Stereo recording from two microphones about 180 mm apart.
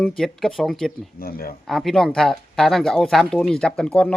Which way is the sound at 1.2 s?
55° left (ahead or behind).